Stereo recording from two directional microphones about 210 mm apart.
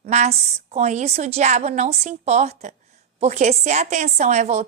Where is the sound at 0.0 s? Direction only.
30° right (ahead or behind).